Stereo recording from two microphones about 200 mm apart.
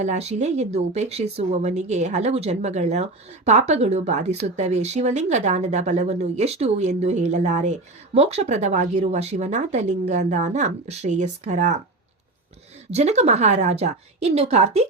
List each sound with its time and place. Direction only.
0.0 s speech: 35° right (ahead or behind)
12.9 s speech: 35° right (ahead or behind)